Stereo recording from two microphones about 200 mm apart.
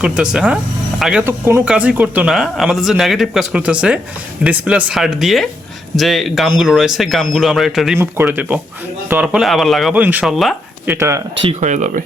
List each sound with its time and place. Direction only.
0.0 s speech: 5° right (ahead or behind)
10.9 s speech: 15° right (ahead or behind)
11.4 s speech: 35° right (ahead or behind)